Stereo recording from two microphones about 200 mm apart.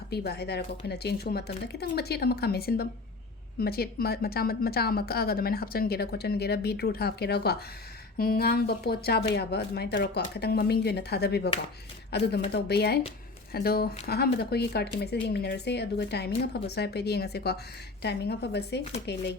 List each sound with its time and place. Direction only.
0.1 s a woman's voice: 55° left (ahead or behind)